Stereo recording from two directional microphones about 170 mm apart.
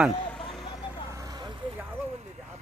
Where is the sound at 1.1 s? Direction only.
20° right (ahead or behind).